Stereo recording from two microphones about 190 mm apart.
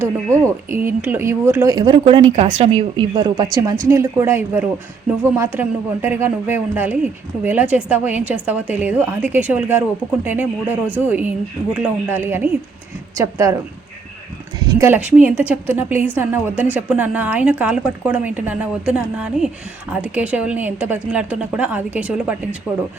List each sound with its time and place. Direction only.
0.0 s speech: 15° right (ahead or behind)
14.7 s speech: 15° right (ahead or behind)